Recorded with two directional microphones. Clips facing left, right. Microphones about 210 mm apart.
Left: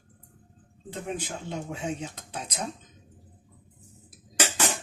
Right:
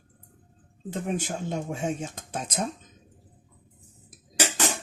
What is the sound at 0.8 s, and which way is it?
Speech, 45° right (ahead or behind).